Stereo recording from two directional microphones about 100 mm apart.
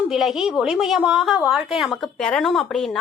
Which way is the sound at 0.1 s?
5° right (ahead or behind).